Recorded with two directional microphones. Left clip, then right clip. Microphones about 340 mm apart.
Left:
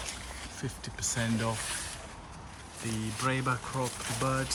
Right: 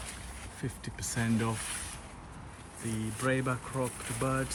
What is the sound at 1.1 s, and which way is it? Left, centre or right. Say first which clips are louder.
Speech: right 1 dB; centre.